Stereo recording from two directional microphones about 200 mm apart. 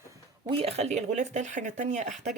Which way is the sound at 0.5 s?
30° right (ahead or behind).